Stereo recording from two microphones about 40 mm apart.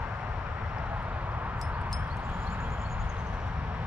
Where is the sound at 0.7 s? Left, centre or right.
Right.